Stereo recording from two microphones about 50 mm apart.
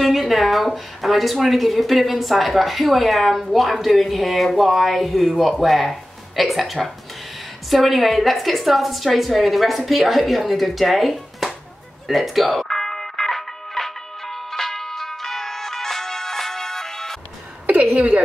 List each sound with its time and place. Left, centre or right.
0.0 s a woman's voice: centre
12.1 s music: centre
17.9 s a woman's voice: right